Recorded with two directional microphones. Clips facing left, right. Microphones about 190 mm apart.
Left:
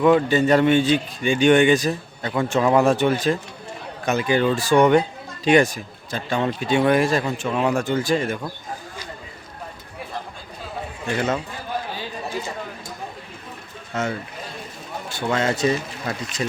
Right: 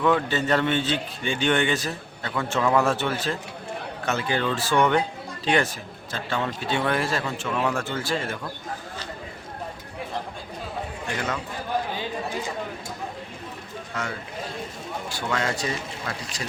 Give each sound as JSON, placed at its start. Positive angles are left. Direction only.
{"t": 0.0, "sound": "a man's voice", "side_deg": 15}
{"t": 11.0, "sound": "a man's voice", "side_deg": 25}
{"t": 13.9, "sound": "speech", "side_deg": 25}
{"t": 15.1, "sound": "speech", "side_deg": 25}